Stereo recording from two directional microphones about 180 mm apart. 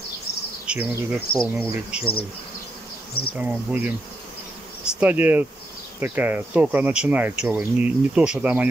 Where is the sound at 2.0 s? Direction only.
30° left (ahead or behind).